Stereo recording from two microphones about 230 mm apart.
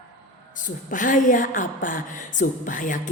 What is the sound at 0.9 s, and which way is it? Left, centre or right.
A woman's voice, left.